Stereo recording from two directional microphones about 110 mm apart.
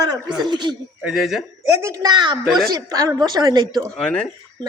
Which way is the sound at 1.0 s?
5° right (ahead or behind).